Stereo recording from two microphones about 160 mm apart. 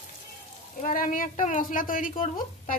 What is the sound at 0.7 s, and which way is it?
A woman's voice, 60° left (ahead or behind).